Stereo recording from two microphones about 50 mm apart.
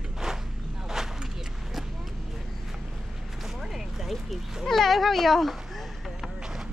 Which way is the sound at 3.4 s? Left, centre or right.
Centre.